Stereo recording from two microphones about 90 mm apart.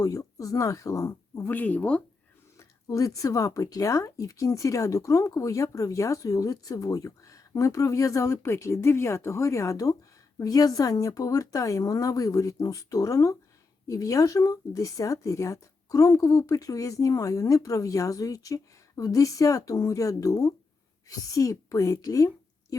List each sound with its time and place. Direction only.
0.0 s speech: 40° left (ahead or behind)
1.4 s speech: 20° left (ahead or behind)
2.6 s speech: 40° left (ahead or behind)